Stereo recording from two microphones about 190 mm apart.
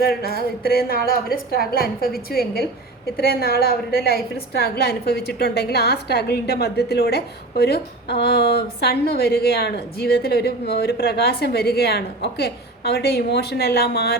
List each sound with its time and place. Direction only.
0.0 s a woman's voice: 55° left (ahead or behind)